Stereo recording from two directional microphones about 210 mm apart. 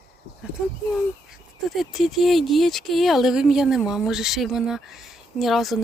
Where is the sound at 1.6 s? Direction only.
Centre (ahead or behind).